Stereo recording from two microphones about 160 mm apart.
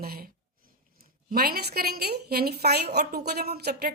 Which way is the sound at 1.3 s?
70° right (ahead or behind).